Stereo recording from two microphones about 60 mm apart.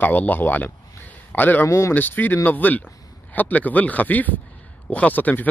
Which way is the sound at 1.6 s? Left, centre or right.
Left.